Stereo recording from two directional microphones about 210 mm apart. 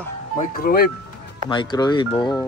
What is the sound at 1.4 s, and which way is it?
Speech, 20° left (ahead or behind).